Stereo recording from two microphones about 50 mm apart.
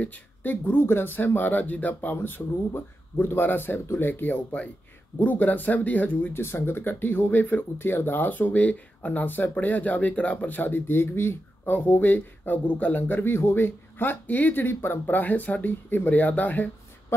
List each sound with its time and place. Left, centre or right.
0.0 s speech: left
6.3 s speech: left
13.2 s speech: left